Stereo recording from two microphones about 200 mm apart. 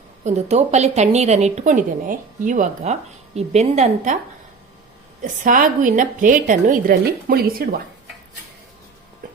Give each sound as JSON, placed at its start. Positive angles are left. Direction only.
{"t": 0.3, "sound": "a woman's voice", "side_deg": -35}
{"t": 5.2, "sound": "a woman's voice", "side_deg": -40}